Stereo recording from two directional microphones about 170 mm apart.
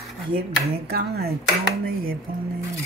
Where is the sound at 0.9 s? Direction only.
70° right (ahead or behind).